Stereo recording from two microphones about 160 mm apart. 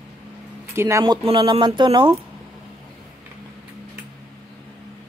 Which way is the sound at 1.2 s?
30° right (ahead or behind).